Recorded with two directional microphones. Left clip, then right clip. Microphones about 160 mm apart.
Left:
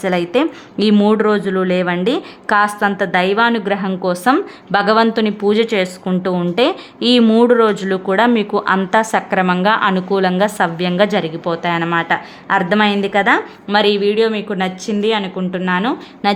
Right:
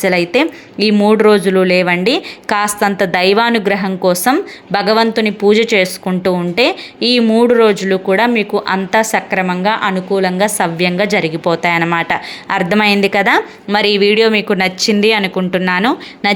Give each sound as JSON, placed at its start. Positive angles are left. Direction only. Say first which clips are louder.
{"t": 0.0, "sound": "a woman's voice", "louder": "right 3 dB", "side_deg": -10}
{"t": 1.5, "sound": "a woman's voice", "louder": "right 5 dB", "side_deg": -15}
{"t": 16.2, "sound": "a woman's voice", "louder": "right 2 dB", "side_deg": -10}